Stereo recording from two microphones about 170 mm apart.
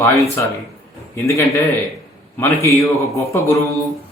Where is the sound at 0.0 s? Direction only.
15° left (ahead or behind).